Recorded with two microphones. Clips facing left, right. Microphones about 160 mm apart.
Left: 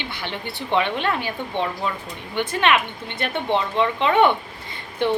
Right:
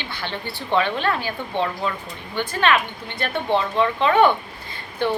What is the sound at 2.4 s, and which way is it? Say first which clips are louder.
A woman's voice: even; 20° left (ahead or behind).